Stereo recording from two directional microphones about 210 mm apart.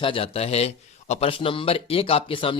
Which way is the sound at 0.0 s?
25° left (ahead or behind).